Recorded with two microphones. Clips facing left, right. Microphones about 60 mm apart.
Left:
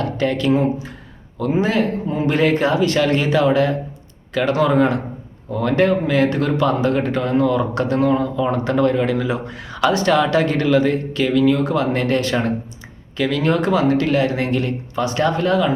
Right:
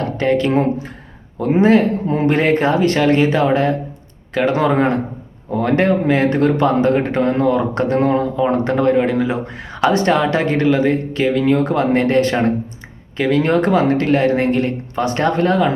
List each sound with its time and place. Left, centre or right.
0.0 s speech: right